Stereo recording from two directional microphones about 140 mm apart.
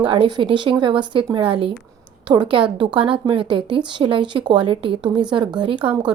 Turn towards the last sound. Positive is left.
turn(degrees=-35)  # may be behind; listen again after turning